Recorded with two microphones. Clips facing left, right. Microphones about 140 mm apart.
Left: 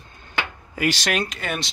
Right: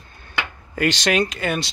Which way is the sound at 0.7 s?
5° left (ahead or behind).